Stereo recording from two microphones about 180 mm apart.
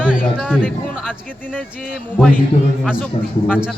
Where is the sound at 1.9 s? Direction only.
5° left (ahead or behind).